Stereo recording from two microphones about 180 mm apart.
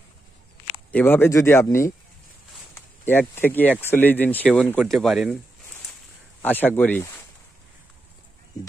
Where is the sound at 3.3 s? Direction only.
10° left (ahead or behind).